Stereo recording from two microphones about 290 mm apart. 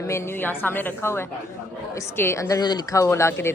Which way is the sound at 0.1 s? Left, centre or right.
Centre.